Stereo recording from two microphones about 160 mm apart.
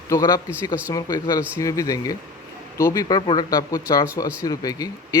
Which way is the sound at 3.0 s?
30° left (ahead or behind).